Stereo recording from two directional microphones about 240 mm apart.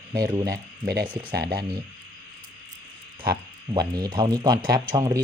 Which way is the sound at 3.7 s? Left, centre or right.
Centre.